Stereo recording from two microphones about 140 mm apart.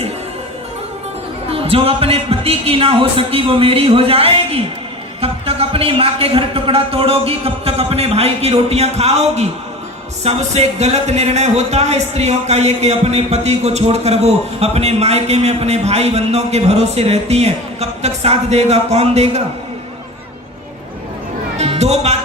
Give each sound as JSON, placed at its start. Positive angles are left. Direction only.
{"t": 1.5, "sound": "speech", "side_deg": -45}
{"t": 21.6, "sound": "music", "side_deg": -50}